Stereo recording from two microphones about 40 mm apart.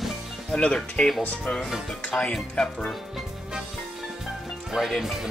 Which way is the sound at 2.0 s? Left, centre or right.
Left.